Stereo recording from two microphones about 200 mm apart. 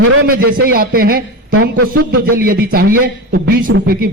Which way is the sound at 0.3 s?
45° right (ahead or behind).